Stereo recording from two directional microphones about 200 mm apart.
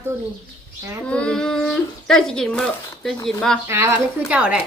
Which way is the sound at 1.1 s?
5° left (ahead or behind).